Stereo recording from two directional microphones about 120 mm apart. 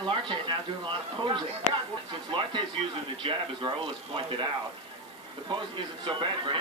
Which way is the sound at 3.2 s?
45° right (ahead or behind).